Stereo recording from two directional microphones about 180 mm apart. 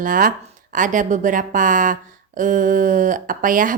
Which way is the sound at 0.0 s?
50° right (ahead or behind).